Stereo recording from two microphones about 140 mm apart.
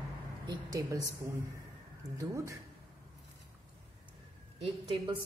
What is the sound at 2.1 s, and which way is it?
Speech, 25° right (ahead or behind).